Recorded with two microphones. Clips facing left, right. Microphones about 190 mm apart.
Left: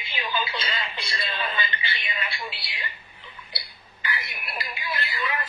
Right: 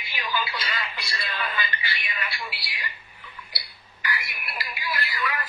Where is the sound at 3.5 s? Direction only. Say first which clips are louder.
Left 2 dB; 25° left (ahead or behind).